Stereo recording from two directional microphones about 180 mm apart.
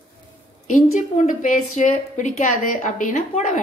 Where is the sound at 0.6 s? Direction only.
40° left (ahead or behind).